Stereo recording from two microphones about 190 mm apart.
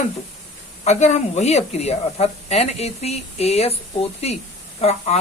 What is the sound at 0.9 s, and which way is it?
Speech, 35° left (ahead or behind).